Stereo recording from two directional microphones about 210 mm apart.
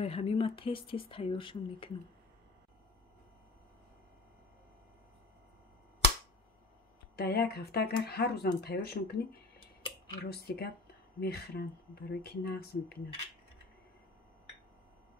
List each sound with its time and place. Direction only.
0.0 s speech: 30° left (ahead or behind)
7.2 s speech: 50° left (ahead or behind)